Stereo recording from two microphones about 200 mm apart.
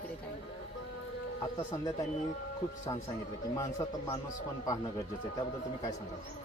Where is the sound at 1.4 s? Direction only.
20° left (ahead or behind).